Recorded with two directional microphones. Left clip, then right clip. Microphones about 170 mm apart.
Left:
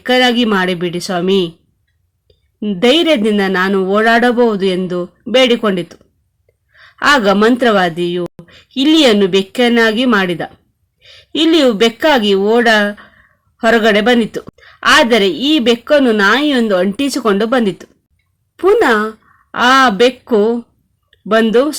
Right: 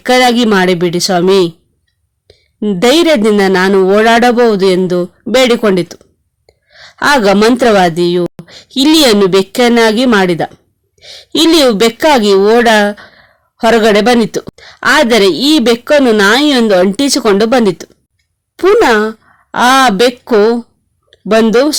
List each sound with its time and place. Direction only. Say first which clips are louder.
0.0 s a woman's voice: right 3 dB; 45° right (ahead or behind)
2.6 s a woman's voice: right 3 dB; 45° right (ahead or behind)